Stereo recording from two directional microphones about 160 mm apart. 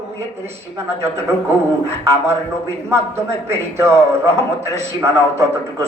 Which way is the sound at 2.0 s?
15° right (ahead or behind).